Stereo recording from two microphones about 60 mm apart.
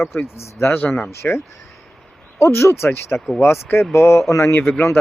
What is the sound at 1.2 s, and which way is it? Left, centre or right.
Speech, left.